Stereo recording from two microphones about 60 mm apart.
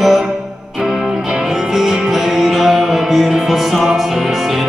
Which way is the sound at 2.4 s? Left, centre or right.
Centre.